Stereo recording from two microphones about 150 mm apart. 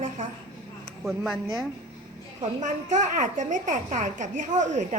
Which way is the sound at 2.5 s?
55° right (ahead or behind).